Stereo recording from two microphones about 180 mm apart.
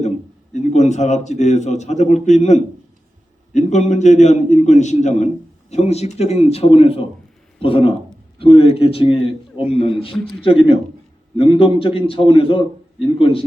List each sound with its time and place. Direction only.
0.5 s a man's voice: 40° left (ahead or behind)